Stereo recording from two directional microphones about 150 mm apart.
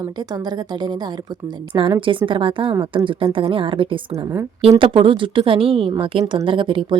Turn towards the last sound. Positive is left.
turn(degrees=-35)  # may be behind; listen again after turning